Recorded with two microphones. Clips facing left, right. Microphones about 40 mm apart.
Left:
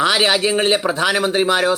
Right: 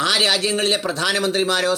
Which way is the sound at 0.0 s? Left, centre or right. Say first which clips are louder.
Left 3 dB; centre.